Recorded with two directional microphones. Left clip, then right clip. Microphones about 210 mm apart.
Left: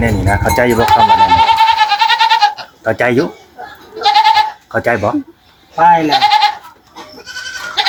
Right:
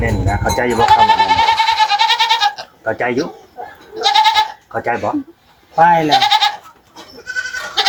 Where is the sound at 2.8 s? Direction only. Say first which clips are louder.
Left 5 dB; 55° left (ahead or behind).